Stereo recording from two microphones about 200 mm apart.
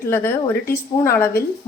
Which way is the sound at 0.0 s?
10° left (ahead or behind).